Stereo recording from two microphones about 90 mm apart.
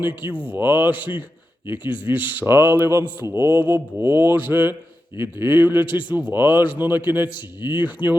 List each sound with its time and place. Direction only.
0.4 s a man's voice: 20° right (ahead or behind)